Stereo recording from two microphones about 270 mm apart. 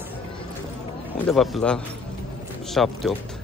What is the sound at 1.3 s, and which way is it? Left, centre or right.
Speech, centre.